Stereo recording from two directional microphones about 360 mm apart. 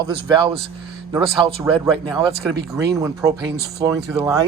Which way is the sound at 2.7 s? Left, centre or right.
Centre.